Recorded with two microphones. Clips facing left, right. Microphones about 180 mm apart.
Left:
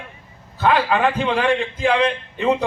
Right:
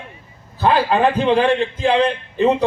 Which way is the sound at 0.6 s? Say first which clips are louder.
Right 2 dB; 30° right (ahead or behind).